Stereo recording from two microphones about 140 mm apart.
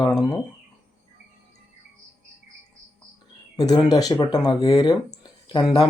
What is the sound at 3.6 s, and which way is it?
Speech, 30° left (ahead or behind).